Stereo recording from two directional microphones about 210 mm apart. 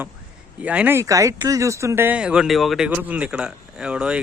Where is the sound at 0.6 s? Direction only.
5° right (ahead or behind).